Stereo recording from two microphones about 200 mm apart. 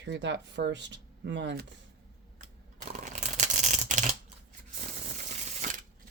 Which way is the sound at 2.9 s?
40° right (ahead or behind).